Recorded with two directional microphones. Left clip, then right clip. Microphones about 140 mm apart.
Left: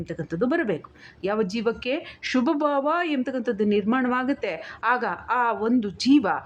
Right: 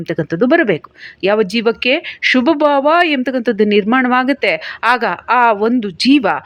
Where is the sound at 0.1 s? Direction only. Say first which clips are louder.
Right 12 dB; 30° right (ahead or behind).